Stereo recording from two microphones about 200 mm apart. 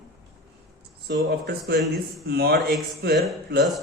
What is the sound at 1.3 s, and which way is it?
A man's voice, 55° right (ahead or behind).